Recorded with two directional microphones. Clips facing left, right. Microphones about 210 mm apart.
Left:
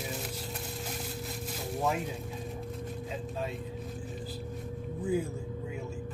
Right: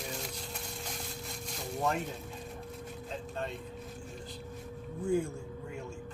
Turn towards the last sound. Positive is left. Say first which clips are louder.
# even
turn(degrees=5)  # may be behind; listen again after turning